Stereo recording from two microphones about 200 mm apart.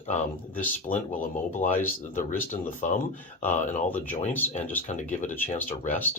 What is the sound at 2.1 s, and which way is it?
Speech, 40° left (ahead or behind).